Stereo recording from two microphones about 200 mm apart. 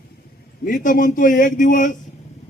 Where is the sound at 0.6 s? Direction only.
40° left (ahead or behind).